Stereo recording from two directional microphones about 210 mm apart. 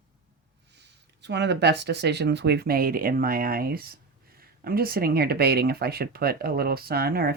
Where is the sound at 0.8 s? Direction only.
55° right (ahead or behind).